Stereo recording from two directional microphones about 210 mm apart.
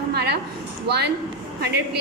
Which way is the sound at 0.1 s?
50° right (ahead or behind).